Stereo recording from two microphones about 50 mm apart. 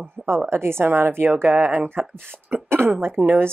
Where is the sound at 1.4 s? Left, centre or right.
Right.